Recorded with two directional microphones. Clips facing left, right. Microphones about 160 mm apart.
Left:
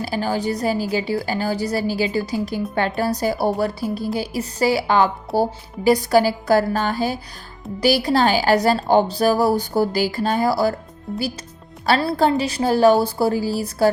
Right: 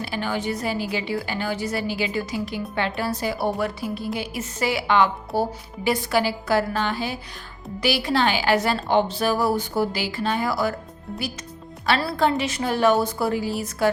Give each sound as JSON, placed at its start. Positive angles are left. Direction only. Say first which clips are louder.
{"t": 0.0, "sound": "a woman's voice", "louder": "left 4 dB", "side_deg": 40}
{"t": 12.0, "sound": "a woman's voice", "louder": "left 4 dB", "side_deg": 35}